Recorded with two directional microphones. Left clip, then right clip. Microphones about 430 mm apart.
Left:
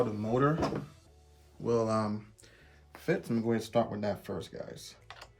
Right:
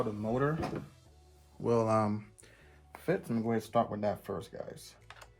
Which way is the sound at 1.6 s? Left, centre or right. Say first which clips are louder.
Right 1 dB; centre.